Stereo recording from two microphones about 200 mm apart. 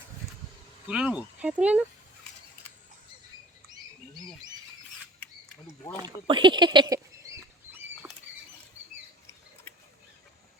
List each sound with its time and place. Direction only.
0.9 s speech: 5° right (ahead or behind)
6.0 s rodents: 25° right (ahead or behind)